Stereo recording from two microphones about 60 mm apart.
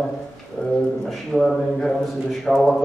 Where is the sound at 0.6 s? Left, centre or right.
Centre.